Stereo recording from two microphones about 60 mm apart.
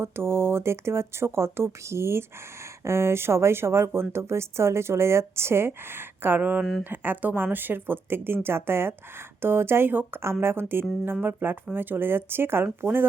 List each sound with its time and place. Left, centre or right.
0.0 s a woman's voice: right